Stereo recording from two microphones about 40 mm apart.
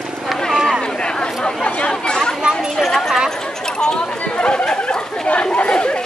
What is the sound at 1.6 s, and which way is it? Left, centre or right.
Chatter, left.